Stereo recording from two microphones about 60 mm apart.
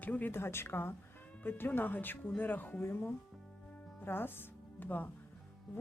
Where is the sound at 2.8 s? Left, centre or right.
Left.